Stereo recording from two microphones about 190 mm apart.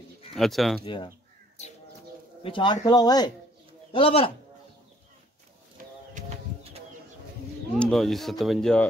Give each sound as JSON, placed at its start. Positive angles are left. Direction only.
{"t": 0.3, "sound": "speech", "side_deg": 0}
{"t": 0.8, "sound": "speech", "side_deg": 25}
{"t": 2.4, "sound": "speech", "side_deg": 25}
{"t": 6.1, "sound": "bird", "side_deg": -30}
{"t": 7.7, "sound": "speech", "side_deg": 0}